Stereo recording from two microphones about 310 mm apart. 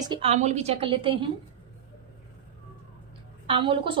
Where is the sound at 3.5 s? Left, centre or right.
Centre.